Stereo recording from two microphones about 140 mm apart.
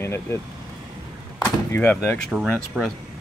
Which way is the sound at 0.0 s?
20° left (ahead or behind).